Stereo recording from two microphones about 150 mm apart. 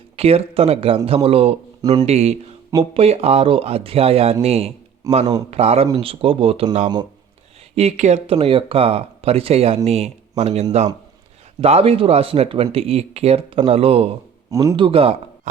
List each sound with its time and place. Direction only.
0.2 s speech: 40° right (ahead or behind)
1.8 s speech: 25° right (ahead or behind)
2.0 s speech: 45° right (ahead or behind)
5.1 s speech: 25° right (ahead or behind)
5.5 s speech: 45° right (ahead or behind)
14.5 s speech: 20° right (ahead or behind)
14.8 s speech: 35° right (ahead or behind)